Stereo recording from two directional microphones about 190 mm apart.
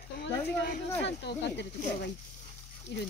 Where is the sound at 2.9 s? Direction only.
65° left (ahead or behind).